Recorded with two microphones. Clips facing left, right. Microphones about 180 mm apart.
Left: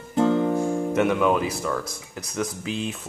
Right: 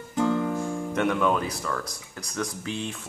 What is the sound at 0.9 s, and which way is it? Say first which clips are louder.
Speech: left 2 dB; 5° left (ahead or behind).